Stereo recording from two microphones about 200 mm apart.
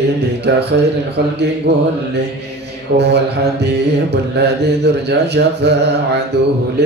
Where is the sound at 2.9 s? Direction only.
55° right (ahead or behind).